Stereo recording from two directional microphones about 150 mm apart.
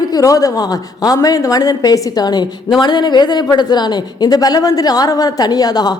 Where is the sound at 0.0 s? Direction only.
25° left (ahead or behind).